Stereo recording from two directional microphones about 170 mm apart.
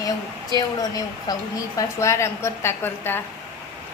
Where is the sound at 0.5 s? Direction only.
20° left (ahead or behind).